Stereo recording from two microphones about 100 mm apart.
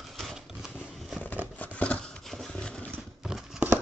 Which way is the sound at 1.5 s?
15° left (ahead or behind).